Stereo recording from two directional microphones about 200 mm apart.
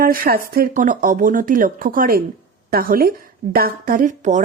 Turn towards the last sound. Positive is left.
turn(degrees=-40)  # may be behind; listen again after turning